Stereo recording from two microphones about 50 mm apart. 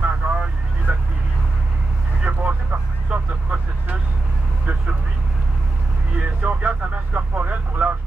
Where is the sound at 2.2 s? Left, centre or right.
Right.